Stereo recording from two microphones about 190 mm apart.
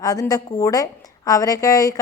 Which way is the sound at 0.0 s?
20° left (ahead or behind).